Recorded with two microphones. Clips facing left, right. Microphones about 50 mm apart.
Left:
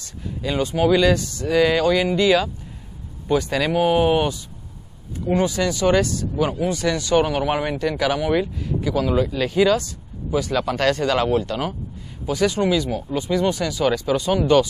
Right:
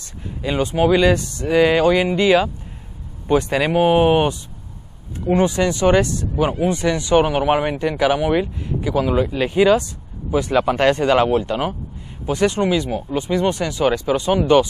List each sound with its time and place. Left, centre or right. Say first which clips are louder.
0.4 s speech: right 2 dB; right